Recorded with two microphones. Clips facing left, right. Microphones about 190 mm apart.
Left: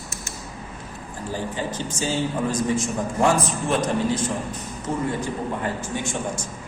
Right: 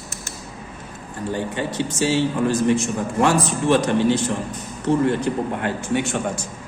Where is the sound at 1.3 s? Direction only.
65° right (ahead or behind).